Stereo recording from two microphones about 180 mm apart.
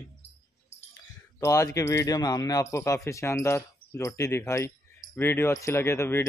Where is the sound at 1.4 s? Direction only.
15° left (ahead or behind).